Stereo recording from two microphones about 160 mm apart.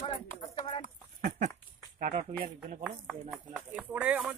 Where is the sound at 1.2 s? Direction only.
50° right (ahead or behind).